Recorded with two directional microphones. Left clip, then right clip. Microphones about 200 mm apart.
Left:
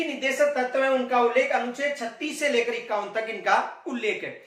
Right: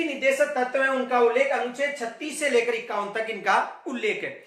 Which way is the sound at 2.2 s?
10° right (ahead or behind).